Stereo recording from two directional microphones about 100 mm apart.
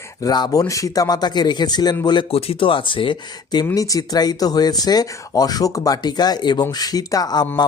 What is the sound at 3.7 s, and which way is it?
Speech, 35° left (ahead or behind).